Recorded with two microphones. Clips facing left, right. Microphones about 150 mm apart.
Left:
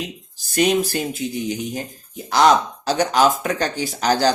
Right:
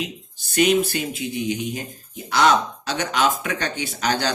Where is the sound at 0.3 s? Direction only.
35° left (ahead or behind).